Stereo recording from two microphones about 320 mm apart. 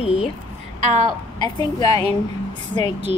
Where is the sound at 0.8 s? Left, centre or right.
Right.